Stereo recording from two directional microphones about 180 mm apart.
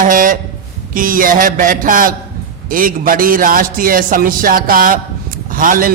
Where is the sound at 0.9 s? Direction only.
50° right (ahead or behind).